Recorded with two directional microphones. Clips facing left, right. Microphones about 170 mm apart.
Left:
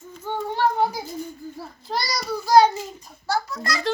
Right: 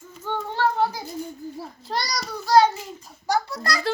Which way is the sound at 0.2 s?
10° left (ahead or behind).